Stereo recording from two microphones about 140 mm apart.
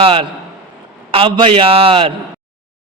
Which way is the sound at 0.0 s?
40° right (ahead or behind).